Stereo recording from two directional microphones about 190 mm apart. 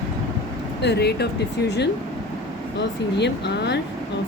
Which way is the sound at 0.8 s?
60° left (ahead or behind).